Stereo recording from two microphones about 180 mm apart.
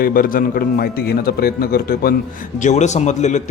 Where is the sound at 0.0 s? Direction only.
50° left (ahead or behind).